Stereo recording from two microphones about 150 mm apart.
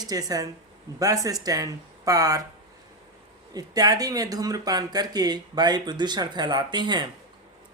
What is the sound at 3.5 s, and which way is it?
Speech, 25° right (ahead or behind).